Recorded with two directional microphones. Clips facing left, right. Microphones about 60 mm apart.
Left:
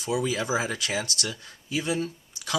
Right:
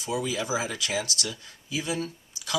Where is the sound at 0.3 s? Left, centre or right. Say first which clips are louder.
Left 2 dB; left.